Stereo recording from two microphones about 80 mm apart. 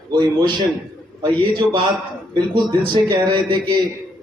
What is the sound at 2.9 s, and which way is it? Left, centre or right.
Speech, right.